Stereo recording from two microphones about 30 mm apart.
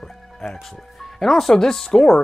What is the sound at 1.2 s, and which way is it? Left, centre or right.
Speech, centre.